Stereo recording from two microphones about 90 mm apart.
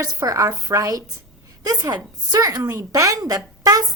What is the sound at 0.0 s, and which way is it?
A woman's voice, 35° right (ahead or behind).